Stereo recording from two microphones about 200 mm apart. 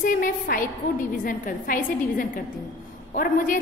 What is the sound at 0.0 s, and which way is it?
A woman's voice, 45° left (ahead or behind).